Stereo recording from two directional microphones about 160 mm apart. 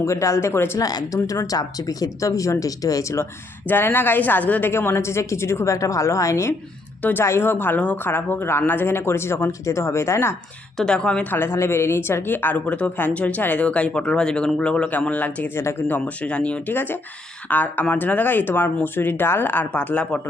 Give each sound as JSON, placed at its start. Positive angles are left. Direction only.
{"t": 0.0, "sound": "speech", "side_deg": 20}
{"t": 10.8, "sound": "speech", "side_deg": 5}